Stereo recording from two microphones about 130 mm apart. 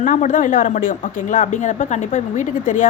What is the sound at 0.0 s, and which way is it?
A woman's voice, 80° left.